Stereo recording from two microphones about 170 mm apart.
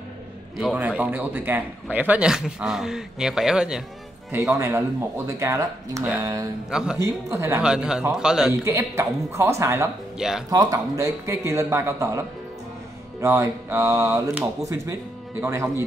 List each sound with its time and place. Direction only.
0.7 s a man's voice: 10° right (ahead or behind)
6.7 s a man's voice: 5° right (ahead or behind)
7.0 s a man's voice: 15° right (ahead or behind)
7.6 s a man's voice: 5° right (ahead or behind)
8.6 s a man's voice: 15° right (ahead or behind)
10.1 s speech: 5° right (ahead or behind)
10.5 s a man's voice: 20° right (ahead or behind)